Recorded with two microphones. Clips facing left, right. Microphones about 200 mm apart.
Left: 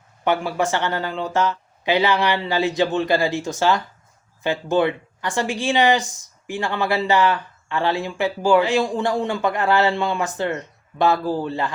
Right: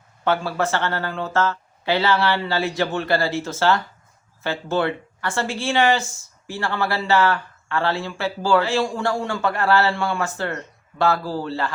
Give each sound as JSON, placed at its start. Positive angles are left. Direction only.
{"t": 0.3, "sound": "speech", "side_deg": 15}